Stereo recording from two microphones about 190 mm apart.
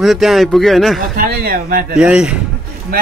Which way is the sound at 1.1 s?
50° right (ahead or behind).